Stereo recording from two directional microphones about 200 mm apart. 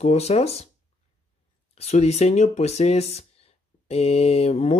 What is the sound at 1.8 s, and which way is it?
Speech, 35° left (ahead or behind).